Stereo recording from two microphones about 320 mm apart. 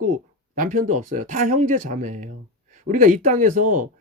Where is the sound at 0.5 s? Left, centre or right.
Right.